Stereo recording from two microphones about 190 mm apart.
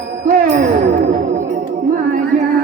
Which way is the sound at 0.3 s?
50° right (ahead or behind).